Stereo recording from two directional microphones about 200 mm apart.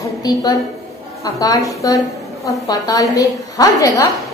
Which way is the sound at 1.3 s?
15° left (ahead or behind).